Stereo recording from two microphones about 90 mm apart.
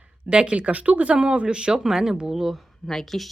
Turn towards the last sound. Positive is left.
turn(degrees=5)  # may be behind; listen again after turning